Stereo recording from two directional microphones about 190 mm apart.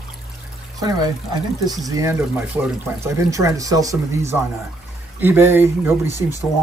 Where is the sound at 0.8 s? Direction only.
20° right (ahead or behind).